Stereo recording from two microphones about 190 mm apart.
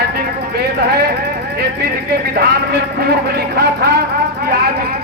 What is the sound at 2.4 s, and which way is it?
Speech, 55° right (ahead or behind).